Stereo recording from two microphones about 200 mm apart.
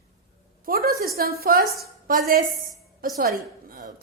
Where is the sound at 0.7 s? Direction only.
50° right (ahead or behind).